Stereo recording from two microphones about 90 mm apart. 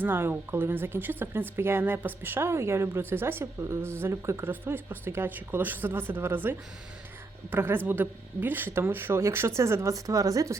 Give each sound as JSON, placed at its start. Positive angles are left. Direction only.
{"t": 0.0, "sound": "a woman's voice", "side_deg": -25}